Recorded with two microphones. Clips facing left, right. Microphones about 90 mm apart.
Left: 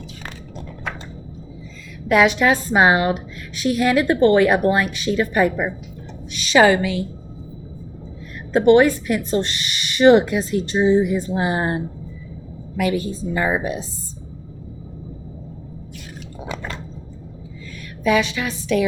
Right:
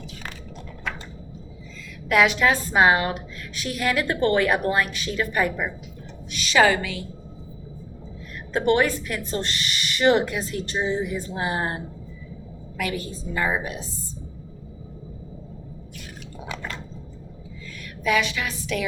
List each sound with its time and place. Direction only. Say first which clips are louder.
2.0 s a woman's voice: left 4 dB; 25° left (ahead or behind)
8.5 s a woman's voice: left 7 dB; 25° left (ahead or behind)
18.0 s a woman's voice: left 4 dB; 25° left (ahead or behind)